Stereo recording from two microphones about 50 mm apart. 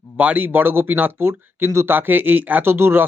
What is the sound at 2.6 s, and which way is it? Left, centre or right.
Speech, right.